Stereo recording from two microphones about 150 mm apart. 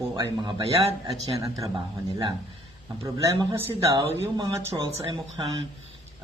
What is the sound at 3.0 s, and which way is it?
Speech, 20° right (ahead or behind).